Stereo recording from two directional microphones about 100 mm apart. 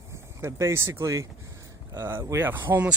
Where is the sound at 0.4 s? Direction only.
25° right (ahead or behind).